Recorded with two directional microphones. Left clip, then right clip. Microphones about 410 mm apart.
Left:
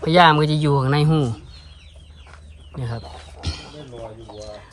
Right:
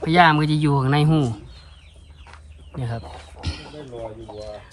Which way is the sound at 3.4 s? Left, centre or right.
Centre.